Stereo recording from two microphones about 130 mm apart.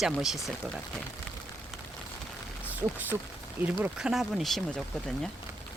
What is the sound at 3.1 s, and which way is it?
Speech, 20° right (ahead or behind).